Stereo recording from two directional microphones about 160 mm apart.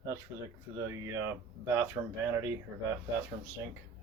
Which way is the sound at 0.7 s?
20° right (ahead or behind).